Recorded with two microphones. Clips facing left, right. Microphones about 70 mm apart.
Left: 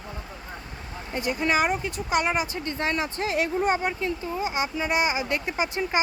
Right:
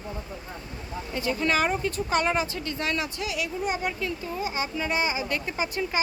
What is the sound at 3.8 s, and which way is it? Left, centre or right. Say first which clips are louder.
Speech: left 2 dB; left.